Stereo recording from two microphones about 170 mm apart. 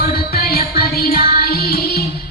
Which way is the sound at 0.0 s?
65° left (ahead or behind).